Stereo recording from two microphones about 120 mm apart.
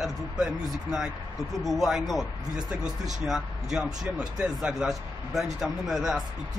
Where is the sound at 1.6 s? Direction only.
Centre (ahead or behind).